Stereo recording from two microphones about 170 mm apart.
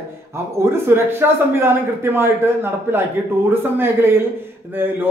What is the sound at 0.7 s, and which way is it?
A man's voice, 15° right (ahead or behind).